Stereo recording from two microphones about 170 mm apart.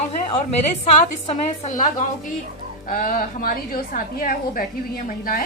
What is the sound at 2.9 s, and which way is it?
A woman's voice, 55° left (ahead or behind).